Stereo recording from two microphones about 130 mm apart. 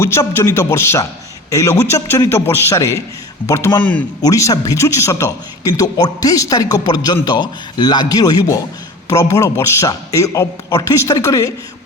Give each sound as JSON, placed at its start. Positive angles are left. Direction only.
{"t": 0.0, "sound": "a man's voice", "side_deg": 20}